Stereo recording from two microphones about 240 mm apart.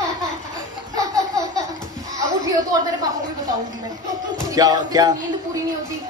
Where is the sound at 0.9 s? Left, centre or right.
Centre.